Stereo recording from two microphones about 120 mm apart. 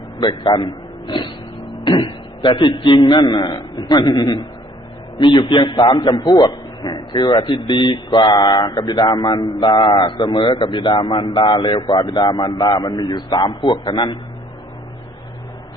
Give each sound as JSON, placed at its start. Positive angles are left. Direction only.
{"t": 0.2, "sound": "a man's voice", "side_deg": 40}